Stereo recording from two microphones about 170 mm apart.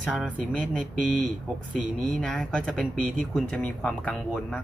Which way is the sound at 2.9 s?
50° right (ahead or behind).